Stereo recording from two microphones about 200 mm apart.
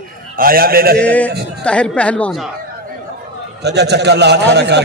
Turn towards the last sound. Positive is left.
turn(degrees=-60)  # may be behind; listen again after turning